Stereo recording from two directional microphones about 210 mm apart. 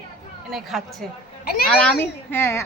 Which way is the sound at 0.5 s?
Centre (ahead or behind).